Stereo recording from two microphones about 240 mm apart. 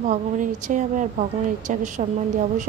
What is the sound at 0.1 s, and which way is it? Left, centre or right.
A woman's voice, right.